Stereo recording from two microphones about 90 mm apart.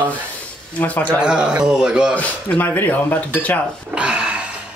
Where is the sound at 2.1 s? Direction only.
15° left (ahead or behind).